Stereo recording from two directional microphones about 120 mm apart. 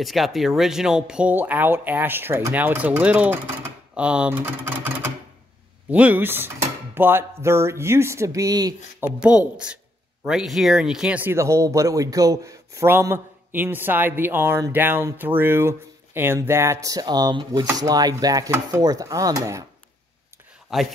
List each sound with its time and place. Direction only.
0.0 s speech: centre (ahead or behind); by 8.7 s 30° right (ahead or behind)
9.0 s speech: 10° right (ahead or behind); by 19.6 s 30° right (ahead or behind)
20.7 s speech: centre (ahead or behind)